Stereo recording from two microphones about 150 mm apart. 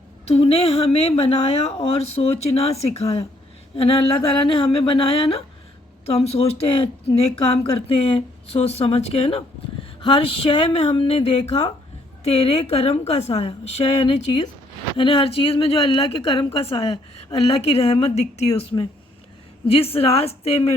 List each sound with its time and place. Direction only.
0.3 s speech: 45° left (ahead or behind)